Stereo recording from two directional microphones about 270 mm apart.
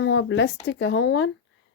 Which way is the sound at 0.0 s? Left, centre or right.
Left.